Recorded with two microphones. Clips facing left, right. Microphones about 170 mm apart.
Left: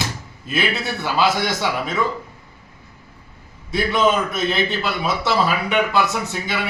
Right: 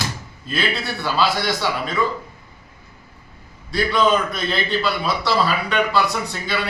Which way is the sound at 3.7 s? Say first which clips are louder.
Even; 20° left (ahead or behind).